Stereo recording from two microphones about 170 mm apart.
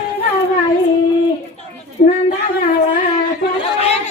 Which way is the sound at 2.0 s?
55° left (ahead or behind).